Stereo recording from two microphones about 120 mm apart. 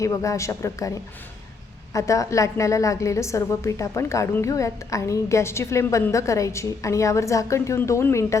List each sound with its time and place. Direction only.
0.0 s a woman's voice: 25° left (ahead or behind)